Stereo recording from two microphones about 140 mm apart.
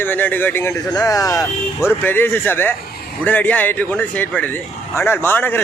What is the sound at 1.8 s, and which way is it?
Speech, 15° left (ahead or behind).